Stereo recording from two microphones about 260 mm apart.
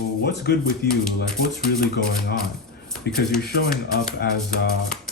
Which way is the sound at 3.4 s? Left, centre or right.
Left.